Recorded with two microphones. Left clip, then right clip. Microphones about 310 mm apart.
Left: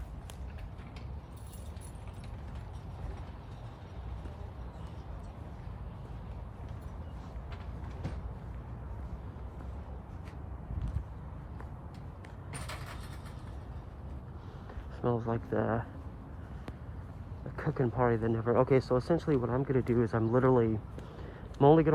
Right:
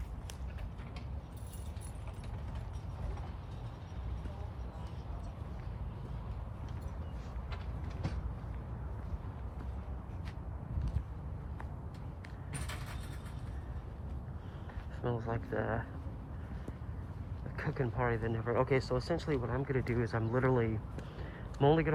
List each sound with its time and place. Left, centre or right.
12.5 s a sound: left
15.2 s speech: centre
17.6 s speech: centre